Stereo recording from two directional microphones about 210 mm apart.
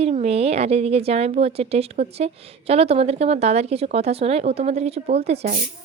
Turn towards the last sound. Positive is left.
turn(degrees=-35)  # may be behind; listen again after turning